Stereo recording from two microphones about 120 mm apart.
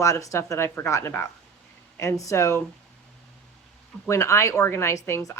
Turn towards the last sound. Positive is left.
turn(degrees=25)  # may be behind; listen again after turning